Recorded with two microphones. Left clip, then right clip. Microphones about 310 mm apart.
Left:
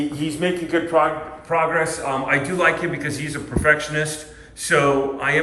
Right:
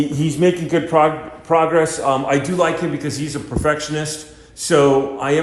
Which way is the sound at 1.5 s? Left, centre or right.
Centre.